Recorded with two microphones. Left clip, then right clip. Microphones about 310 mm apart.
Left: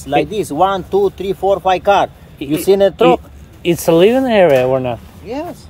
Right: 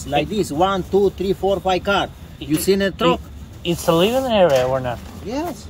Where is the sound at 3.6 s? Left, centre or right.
Left.